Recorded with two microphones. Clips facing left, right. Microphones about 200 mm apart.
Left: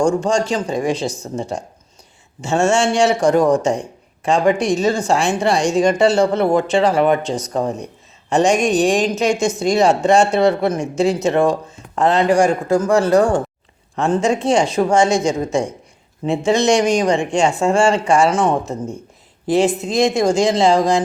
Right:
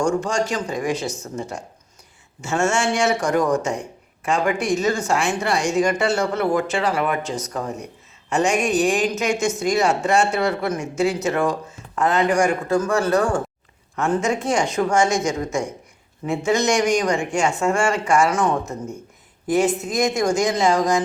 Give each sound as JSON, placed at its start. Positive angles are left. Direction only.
{"t": 0.0, "sound": "speech", "side_deg": 30}